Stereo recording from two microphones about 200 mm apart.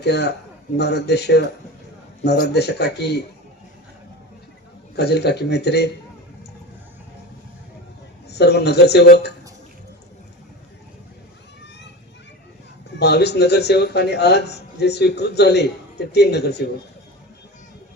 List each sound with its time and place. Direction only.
0.0 s a man's voice: 55° left (ahead or behind)
4.9 s a man's voice: 55° left (ahead or behind)
8.3 s a man's voice: 55° left (ahead or behind)
13.0 s a man's voice: 55° left (ahead or behind)